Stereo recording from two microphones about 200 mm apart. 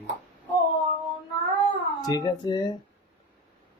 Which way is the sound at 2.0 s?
20° left (ahead or behind).